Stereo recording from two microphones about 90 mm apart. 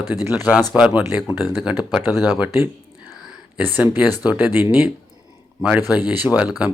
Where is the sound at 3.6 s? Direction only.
15° right (ahead or behind).